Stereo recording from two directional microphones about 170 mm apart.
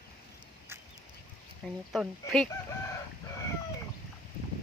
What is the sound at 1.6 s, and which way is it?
Speech, 5° left (ahead or behind).